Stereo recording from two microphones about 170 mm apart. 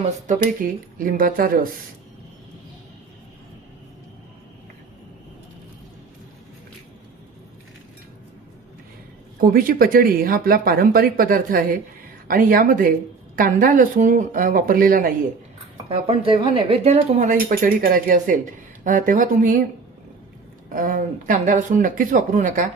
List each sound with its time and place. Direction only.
0.3 s speech: 55° right (ahead or behind)
9.4 s speech: 55° right (ahead or behind)
15.9 s speech: 35° right (ahead or behind); by 19.6 s 55° right (ahead or behind)
20.7 s speech: 50° right (ahead or behind)